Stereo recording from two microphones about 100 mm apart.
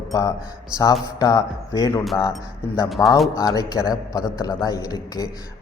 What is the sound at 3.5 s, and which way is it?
A man's voice, 40° left (ahead or behind).